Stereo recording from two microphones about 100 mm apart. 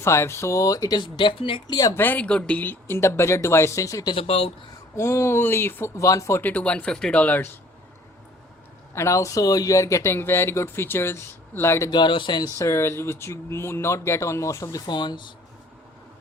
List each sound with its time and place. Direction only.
0.0 s speech: 30° left (ahead or behind); by 1.6 s 60° left (ahead or behind)
1.9 s speech: 20° left (ahead or behind)
4.1 s speech: 75° left (ahead or behind)
4.9 s speech: 25° left (ahead or behind)
6.4 s speech: 15° left (ahead or behind)
9.0 s speech: 30° left (ahead or behind)
11.9 s speech: 50° left (ahead or behind)
12.5 s speech: 30° left (ahead or behind); by 15.3 s 50° left (ahead or behind)